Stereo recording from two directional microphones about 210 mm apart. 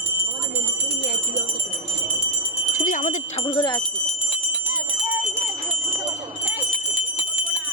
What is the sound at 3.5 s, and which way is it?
Speech, 20° left (ahead or behind).